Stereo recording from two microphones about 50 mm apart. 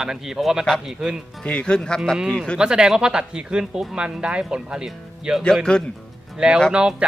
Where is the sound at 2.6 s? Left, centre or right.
Centre.